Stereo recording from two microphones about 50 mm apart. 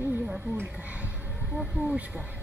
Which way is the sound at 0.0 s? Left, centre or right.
Right.